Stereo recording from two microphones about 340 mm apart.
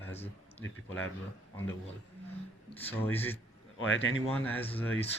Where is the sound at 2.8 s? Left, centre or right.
Centre.